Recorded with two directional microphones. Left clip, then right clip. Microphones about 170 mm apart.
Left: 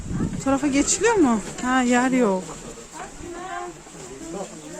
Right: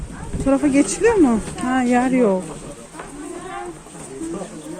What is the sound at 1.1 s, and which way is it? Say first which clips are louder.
Speech: right 3 dB; 25° left (ahead or behind).